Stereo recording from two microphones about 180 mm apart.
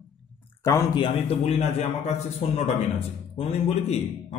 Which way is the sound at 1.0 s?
35° left (ahead or behind).